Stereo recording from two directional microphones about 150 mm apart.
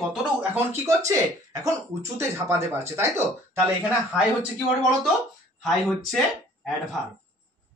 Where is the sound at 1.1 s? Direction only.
20° right (ahead or behind).